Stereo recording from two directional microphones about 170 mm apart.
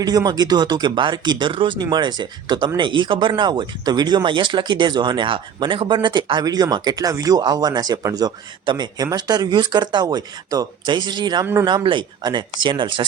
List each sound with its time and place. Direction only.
0.0 s speech: 25° right (ahead or behind)